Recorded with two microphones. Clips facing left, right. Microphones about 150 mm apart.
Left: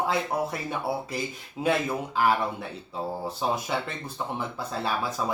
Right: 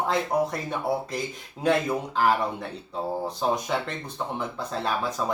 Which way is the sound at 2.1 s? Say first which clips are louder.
Even; 5° left (ahead or behind).